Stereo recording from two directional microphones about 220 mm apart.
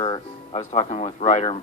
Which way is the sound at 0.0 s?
25° left (ahead or behind).